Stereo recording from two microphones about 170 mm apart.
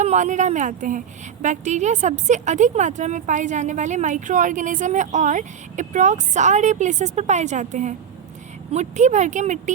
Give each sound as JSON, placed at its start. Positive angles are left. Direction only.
{"t": 0.0, "sound": "a woman's voice", "side_deg": -45}